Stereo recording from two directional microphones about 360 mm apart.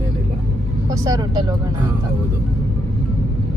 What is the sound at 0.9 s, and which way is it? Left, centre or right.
Speech, centre.